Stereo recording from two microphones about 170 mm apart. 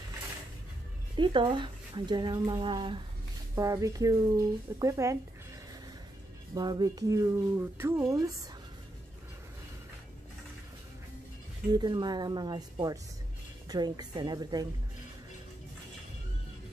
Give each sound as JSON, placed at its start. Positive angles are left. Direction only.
{"t": 1.1, "sound": "speech", "side_deg": -30}
{"t": 6.5, "sound": "speech", "side_deg": -25}
{"t": 11.7, "sound": "speech", "side_deg": -25}